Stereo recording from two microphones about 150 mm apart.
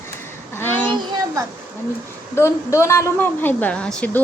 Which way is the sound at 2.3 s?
20° left (ahead or behind).